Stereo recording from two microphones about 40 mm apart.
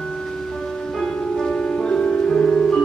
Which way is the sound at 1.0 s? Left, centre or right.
Centre.